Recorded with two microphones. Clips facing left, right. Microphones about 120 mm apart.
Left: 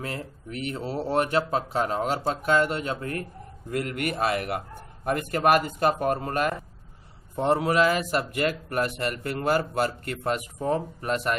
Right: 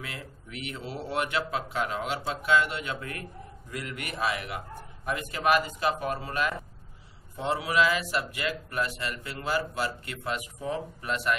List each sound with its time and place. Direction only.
0.0 s speech: 40° left (ahead or behind)
3.7 s speech: 55° left (ahead or behind)